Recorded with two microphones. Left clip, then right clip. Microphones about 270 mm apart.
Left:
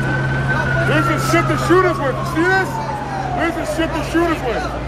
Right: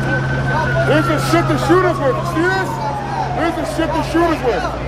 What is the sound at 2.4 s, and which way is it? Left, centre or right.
Music, right.